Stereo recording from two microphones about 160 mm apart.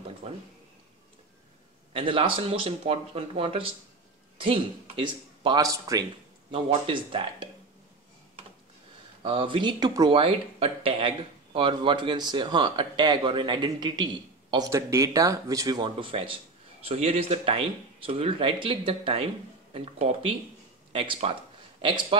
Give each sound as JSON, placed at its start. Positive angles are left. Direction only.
{"t": 0.2, "sound": "speech", "side_deg": -40}
{"t": 2.0, "sound": "speech", "side_deg": -35}
{"t": 6.5, "sound": "speech", "side_deg": -35}
{"t": 9.2, "sound": "speech", "side_deg": -35}